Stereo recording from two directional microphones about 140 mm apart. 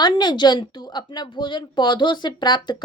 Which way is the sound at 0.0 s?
30° left (ahead or behind).